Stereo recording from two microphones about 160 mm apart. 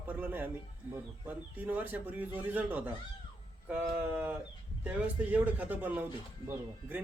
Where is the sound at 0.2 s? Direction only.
10° right (ahead or behind).